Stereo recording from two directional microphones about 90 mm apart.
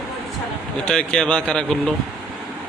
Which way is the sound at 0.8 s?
5° left (ahead or behind).